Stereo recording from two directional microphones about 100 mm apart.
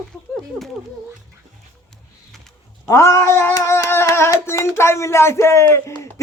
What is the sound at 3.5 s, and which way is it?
A child's voice, 25° left (ahead or behind).